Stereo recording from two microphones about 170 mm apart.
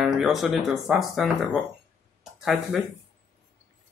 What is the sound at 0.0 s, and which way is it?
Speech, centre (ahead or behind).